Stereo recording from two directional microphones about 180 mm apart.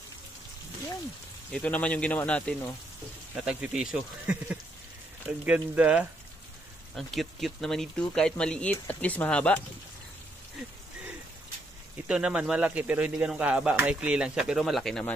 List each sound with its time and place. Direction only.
1.5 s speech: 5° left (ahead or behind)
3.3 s speech: 5° right (ahead or behind)
12.1 s speech: 5° right (ahead or behind)